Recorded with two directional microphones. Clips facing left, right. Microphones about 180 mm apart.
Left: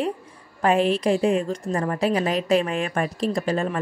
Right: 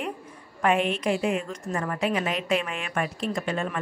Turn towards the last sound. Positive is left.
turn(degrees=35)  # may be behind; listen again after turning